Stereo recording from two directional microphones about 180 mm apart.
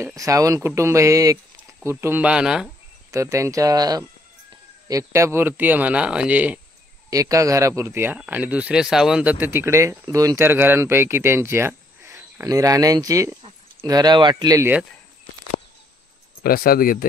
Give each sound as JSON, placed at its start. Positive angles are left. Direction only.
{"t": 0.0, "sound": "speech", "side_deg": -15}
{"t": 3.1, "sound": "speech", "side_deg": -15}
{"t": 16.4, "sound": "speech", "side_deg": 55}